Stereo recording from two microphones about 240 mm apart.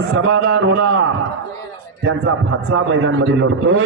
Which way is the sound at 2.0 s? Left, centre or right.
Right.